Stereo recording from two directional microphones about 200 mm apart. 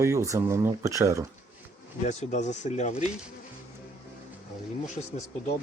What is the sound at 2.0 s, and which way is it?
Speech, 35° left (ahead or behind).